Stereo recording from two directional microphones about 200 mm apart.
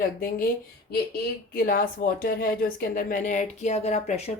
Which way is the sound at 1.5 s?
45° left (ahead or behind).